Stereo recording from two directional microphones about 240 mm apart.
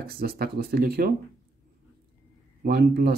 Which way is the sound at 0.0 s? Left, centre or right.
Right.